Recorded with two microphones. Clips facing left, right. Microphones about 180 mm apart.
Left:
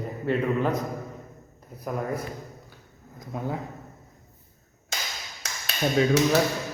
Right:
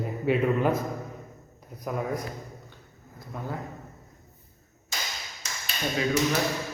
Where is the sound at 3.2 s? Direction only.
20° left (ahead or behind).